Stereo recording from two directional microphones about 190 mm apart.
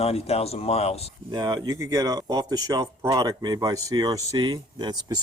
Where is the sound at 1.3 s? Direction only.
25° right (ahead or behind).